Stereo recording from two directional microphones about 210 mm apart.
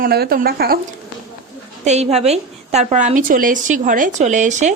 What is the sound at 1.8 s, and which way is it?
A woman's voice, 30° right (ahead or behind).